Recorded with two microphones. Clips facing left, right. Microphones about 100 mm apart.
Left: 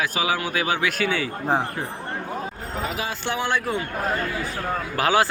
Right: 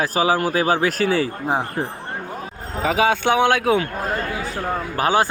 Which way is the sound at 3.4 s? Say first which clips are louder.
Right 5 dB; 65° right (ahead or behind).